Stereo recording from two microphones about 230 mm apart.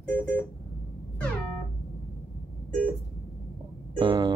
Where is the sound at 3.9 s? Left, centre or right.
Centre.